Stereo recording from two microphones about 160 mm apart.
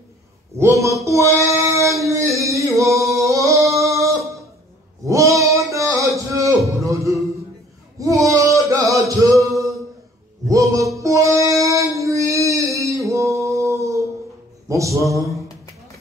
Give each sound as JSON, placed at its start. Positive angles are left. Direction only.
{"t": 0.6, "sound": "speech", "side_deg": -20}
{"t": 1.0, "sound": "female singing", "side_deg": -20}
{"t": 5.0, "sound": "music", "side_deg": -20}
{"t": 8.0, "sound": "a sound", "side_deg": -20}
{"t": 8.8, "sound": "music", "side_deg": -20}
{"t": 11.6, "sound": "child singing", "side_deg": -20}
{"t": 12.0, "sound": "a sound", "side_deg": -20}